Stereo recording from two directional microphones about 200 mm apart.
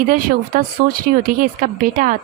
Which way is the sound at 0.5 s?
45° right (ahead or behind).